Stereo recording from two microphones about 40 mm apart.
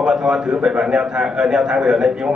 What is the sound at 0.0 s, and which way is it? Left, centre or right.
A man's voice, centre.